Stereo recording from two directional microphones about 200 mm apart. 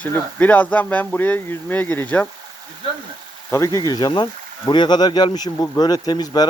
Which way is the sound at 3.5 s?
15° left (ahead or behind).